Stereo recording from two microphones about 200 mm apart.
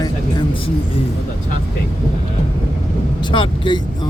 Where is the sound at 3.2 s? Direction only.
25° left (ahead or behind).